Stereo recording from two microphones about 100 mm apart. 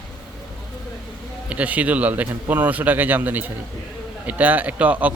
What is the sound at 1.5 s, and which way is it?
A man's voice, 15° right (ahead or behind).